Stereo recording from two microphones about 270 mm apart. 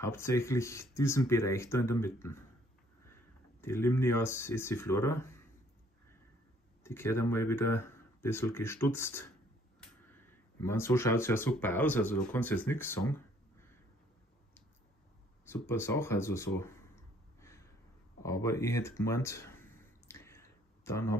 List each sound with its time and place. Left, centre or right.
0.0 s speech: centre
3.6 s speech: centre
6.8 s speech: centre
15.4 s a sound: centre